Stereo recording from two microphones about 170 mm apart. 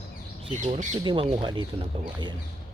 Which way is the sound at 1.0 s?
25° right (ahead or behind).